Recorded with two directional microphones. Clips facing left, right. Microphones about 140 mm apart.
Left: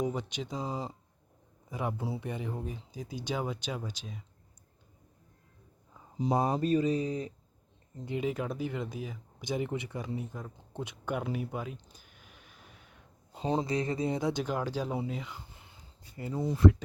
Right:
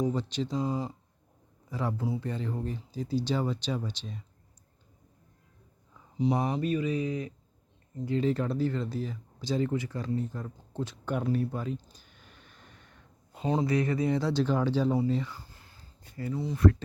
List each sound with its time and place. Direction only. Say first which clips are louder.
0.0 s speech: right 4 dB; 15° left (ahead or behind)
6.4 s mantra: left 2 dB; 40° left (ahead or behind)
8.0 s speech: right 5 dB; 15° left (ahead or behind)
13.3 s speech: right 3 dB; 30° left (ahead or behind); by 15.3 s 5° left (ahead or behind)
15.3 s a sound: even; 20° left (ahead or behind)
16.3 s speech: left 1 dB; 45° left (ahead or behind)